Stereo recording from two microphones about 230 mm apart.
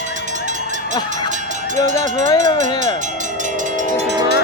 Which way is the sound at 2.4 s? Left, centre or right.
Right.